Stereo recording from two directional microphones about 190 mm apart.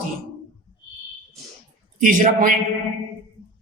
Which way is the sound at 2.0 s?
45° right (ahead or behind).